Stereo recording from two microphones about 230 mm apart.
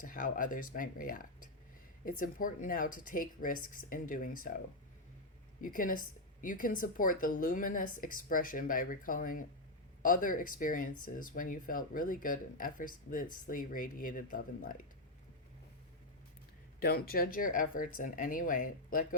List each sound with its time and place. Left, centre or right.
0.0 s speech: left
5.6 s speech: left
16.8 s speech: left